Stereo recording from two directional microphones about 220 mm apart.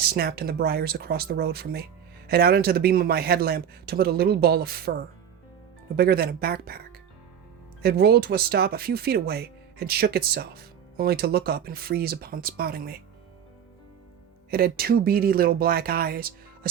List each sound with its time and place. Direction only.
0.0 s speech: 45° right (ahead or behind)
14.5 s speech: 45° right (ahead or behind)